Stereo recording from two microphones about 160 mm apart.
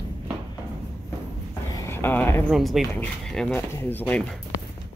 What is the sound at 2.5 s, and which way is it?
Speech, centre (ahead or behind).